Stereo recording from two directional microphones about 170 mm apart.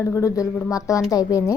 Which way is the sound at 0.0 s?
15° left (ahead or behind).